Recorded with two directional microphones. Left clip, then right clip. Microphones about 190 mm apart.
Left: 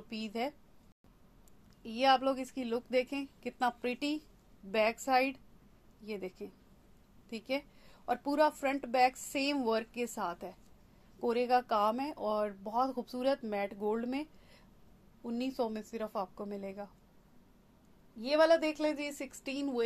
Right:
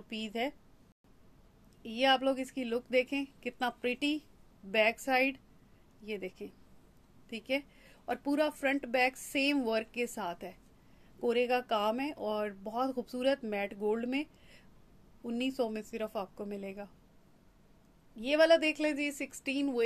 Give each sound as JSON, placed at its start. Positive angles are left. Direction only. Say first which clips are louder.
{"t": 0.1, "sound": "speech", "louder": "right 2 dB", "side_deg": -15}
{"t": 1.8, "sound": "a woman's voice", "louder": "even", "side_deg": -15}
{"t": 18.2, "sound": "a woman's voice", "louder": "right 1 dB", "side_deg": -20}